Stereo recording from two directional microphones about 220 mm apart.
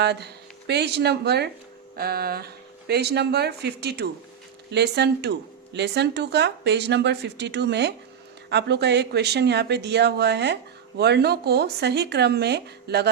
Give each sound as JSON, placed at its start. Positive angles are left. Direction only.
{"t": 0.0, "sound": "speech", "side_deg": -50}